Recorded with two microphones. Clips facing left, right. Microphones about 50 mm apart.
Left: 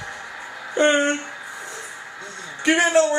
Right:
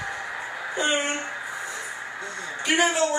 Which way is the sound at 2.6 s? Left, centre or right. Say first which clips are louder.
Left 5 dB; left.